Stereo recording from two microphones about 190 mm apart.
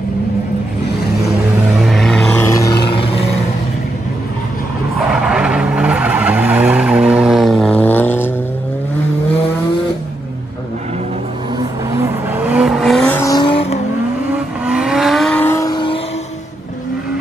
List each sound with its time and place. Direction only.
1.8 s vehicle: centre (ahead or behind)
2.4 s a sound: 15° left (ahead or behind)
4.9 s skidding: 5° right (ahead or behind)
11.9 s vehicle: 10° right (ahead or behind)
13.2 s vehicle: 20° left (ahead or behind)
14.7 s vehicle: 5° right (ahead or behind); by 16.0 s 25° left (ahead or behind)